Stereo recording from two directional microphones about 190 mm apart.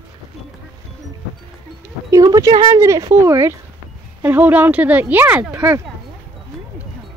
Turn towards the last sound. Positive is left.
turn(degrees=-10)  # may be behind; listen again after turning